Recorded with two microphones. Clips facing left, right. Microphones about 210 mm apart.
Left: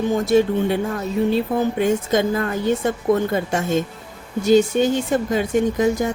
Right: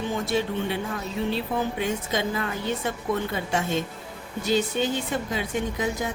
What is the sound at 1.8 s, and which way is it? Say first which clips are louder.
Speech: left 8 dB; 45° left (ahead or behind).